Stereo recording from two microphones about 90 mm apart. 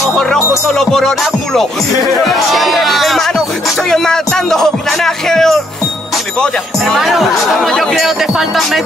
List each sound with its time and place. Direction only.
0.1 s speech: 5° left (ahead or behind)
2.2 s music: centre (ahead or behind)
3.9 s speech: 5° left (ahead or behind)
7.0 s speech: centre (ahead or behind)